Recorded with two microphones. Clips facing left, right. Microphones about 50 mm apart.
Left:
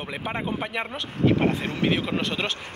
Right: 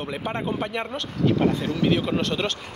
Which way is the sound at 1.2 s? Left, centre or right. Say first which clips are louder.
Even; left.